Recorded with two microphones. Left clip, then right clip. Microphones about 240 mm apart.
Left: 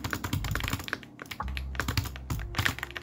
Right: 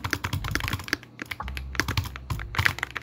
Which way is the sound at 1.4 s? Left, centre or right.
Centre.